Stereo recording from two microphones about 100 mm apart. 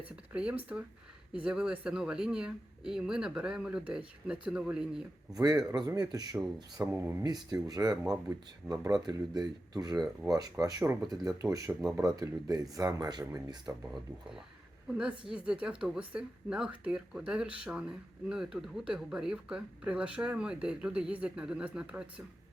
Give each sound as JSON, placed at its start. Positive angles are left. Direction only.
{"t": 0.3, "sound": "speech", "side_deg": -15}
{"t": 5.3, "sound": "speech", "side_deg": -40}
{"t": 6.9, "sound": "speech", "side_deg": -25}
{"t": 7.3, "sound": "speech", "side_deg": -40}
{"t": 15.3, "sound": "speech", "side_deg": -10}